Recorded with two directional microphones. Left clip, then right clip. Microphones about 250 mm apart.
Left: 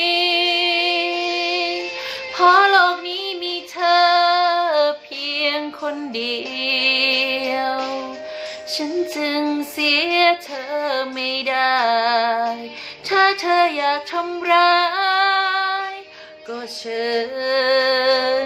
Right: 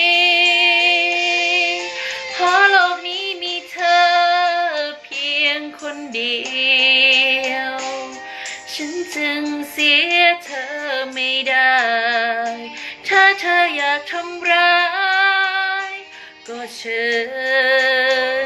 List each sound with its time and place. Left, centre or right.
0.0 s music: centre
2.6 s child singing: centre
9.2 s child singing: centre
10.8 s a sound: centre
13.1 s female singing: centre
16.9 s music: centre